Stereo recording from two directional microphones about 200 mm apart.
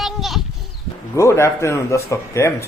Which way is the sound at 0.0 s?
Centre (ahead or behind).